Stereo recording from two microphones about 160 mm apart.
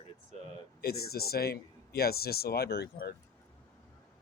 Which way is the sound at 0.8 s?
75° left (ahead or behind).